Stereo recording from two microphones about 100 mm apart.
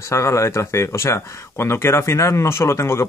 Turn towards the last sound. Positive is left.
turn(degrees=25)  # may be behind; listen again after turning